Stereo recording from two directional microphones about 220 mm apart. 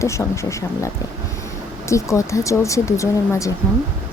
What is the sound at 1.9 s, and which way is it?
Speech, 15° left (ahead or behind).